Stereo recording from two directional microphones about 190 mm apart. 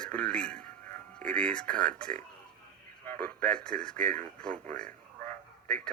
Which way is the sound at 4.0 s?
40° right (ahead or behind).